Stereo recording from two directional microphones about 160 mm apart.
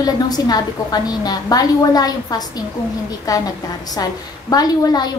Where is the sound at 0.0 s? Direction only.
25° left (ahead or behind).